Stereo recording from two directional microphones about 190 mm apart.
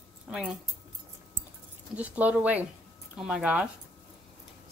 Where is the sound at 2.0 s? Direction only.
5° right (ahead or behind).